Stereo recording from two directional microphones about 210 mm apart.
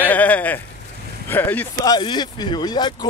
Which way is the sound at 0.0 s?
10° left (ahead or behind).